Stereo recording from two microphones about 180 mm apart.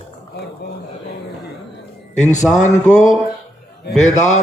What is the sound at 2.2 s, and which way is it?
Speech, 40° left (ahead or behind).